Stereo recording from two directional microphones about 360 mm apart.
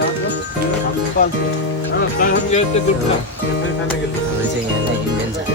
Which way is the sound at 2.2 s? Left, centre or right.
Centre.